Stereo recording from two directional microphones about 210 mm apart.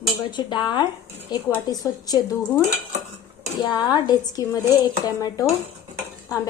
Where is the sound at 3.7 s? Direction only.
20° left (ahead or behind).